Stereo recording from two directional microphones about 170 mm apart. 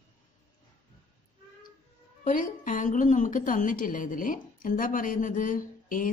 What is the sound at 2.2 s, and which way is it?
A woman's voice, 50° left (ahead or behind).